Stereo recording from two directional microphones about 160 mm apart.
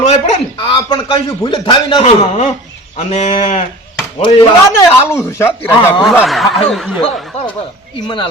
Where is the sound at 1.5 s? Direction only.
30° left (ahead or behind).